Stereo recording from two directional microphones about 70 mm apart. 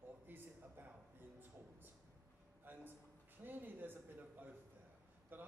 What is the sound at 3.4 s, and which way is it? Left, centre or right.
Speech, right.